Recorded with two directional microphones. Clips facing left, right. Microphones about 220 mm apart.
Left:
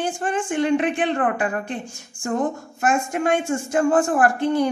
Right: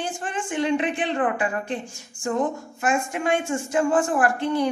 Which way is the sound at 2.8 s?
45° left (ahead or behind).